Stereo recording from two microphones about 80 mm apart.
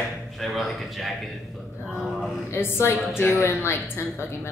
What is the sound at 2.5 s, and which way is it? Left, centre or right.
A woman's voice, left.